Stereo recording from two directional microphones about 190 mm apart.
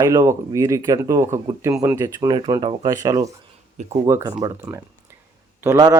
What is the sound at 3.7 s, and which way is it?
Speech, 40° right (ahead or behind).